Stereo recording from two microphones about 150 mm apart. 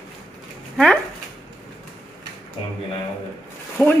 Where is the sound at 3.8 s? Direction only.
15° left (ahead or behind).